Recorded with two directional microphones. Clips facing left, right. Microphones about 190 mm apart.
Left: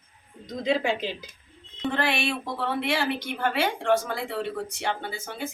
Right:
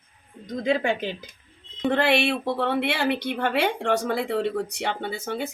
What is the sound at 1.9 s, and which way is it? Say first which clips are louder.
Speech: right 6 dB; 65° right (ahead or behind).